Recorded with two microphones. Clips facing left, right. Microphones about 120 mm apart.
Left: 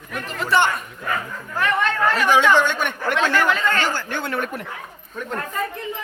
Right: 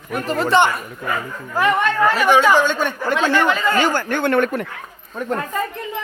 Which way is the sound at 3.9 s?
55° right (ahead or behind).